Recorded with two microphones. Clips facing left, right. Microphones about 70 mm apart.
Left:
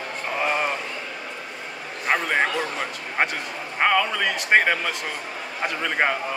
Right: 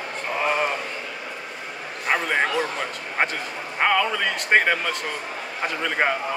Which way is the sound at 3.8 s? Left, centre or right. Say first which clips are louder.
Even; centre.